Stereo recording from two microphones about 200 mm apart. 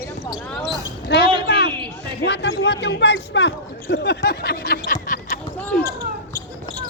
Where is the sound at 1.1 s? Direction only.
55° left (ahead or behind).